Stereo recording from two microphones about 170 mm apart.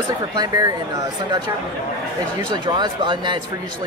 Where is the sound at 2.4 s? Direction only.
25° right (ahead or behind).